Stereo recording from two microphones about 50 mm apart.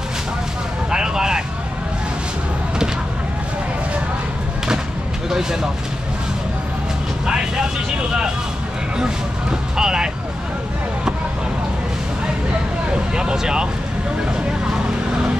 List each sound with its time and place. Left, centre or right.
0.8 s vehicle: centre
5.3 s speech: centre
7.2 s vehicle: centre
8.9 s vehicle: centre
12.9 s speech: centre